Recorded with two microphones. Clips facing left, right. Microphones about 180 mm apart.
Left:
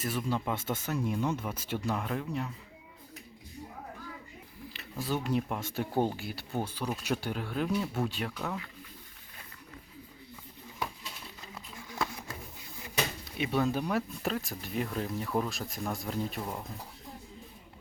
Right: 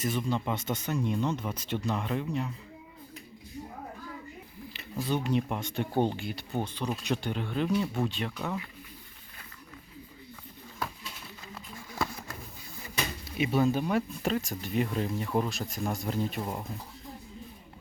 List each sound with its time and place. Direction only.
0.0 s speech: 5° left (ahead or behind)
4.7 s speech: centre (ahead or behind)
13.3 s speech: 5° right (ahead or behind)
16.4 s speech: 15° right (ahead or behind)